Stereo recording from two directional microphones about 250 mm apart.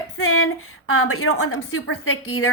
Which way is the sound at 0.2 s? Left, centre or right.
Left.